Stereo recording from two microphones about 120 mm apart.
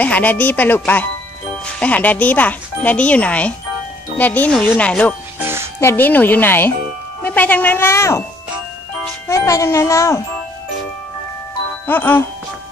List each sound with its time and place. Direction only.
0.0 s speech: 15° left (ahead or behind)
9.3 s speech: 25° left (ahead or behind)
11.8 s speech: 15° left (ahead or behind)